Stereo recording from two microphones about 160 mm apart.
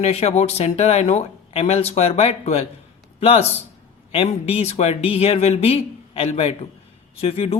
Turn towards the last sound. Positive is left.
turn(degrees=35)  # may be behind; listen again after turning